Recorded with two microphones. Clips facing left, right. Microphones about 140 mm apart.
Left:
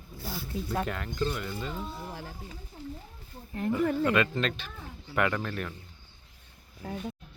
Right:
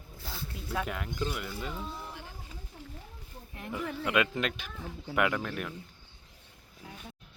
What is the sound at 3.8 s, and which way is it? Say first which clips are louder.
Speech: left 9 dB; 50° left (ahead or behind).